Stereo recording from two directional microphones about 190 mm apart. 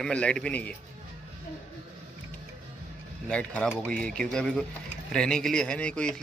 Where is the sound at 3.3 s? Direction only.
5° left (ahead or behind).